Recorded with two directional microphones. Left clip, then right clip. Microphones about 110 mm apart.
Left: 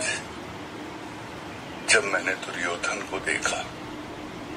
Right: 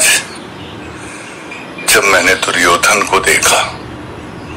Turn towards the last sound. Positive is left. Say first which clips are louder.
# right 17 dB
turn(degrees=-45)  # may be behind; listen again after turning